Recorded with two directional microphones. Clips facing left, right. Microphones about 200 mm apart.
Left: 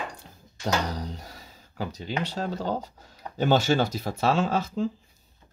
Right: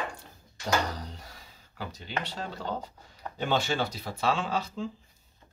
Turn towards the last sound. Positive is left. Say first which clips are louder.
# left 6 dB
turn(degrees=45)  # may be behind; listen again after turning